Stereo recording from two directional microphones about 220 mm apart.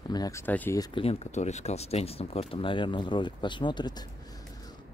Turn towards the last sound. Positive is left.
turn(degrees=20)  # may be behind; listen again after turning